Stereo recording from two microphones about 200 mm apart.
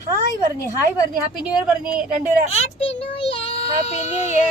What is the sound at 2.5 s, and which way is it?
Child singing, 30° left (ahead or behind).